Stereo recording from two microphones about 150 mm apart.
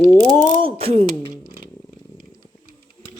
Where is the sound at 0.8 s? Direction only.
40° right (ahead or behind).